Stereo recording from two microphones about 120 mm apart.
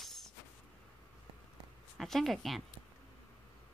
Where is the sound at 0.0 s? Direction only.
Centre (ahead or behind).